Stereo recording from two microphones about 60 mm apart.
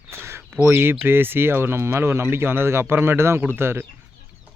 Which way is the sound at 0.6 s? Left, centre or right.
Right.